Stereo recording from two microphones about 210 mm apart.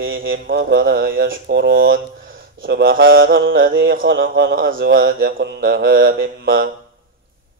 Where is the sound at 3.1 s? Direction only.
45° right (ahead or behind).